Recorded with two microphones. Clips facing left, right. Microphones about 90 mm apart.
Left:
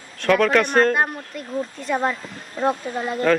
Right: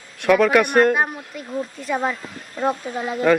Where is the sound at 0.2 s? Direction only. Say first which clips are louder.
Right 2 dB; 5° right (ahead or behind).